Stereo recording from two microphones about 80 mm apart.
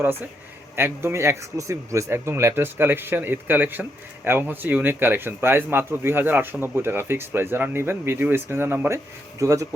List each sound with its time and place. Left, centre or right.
0.8 s speech: right
9.4 s speech: right